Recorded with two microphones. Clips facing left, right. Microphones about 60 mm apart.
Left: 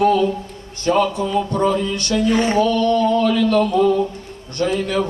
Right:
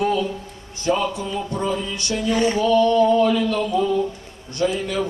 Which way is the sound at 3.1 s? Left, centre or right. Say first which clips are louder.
Left 3 dB; left.